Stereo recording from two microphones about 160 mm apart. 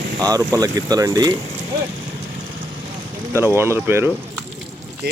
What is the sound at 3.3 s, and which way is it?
Speech, 15° right (ahead or behind).